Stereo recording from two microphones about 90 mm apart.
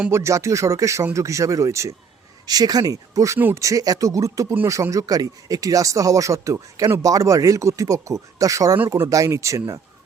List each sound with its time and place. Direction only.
0.1 s speech: 30° right (ahead or behind)
2.5 s speech: 45° right (ahead or behind)
3.3 s speech: 30° right (ahead or behind)